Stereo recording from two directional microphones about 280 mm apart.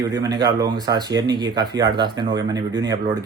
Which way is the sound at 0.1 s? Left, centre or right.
Centre.